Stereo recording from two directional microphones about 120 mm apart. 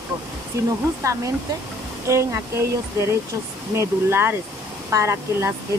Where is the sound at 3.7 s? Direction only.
20° right (ahead or behind).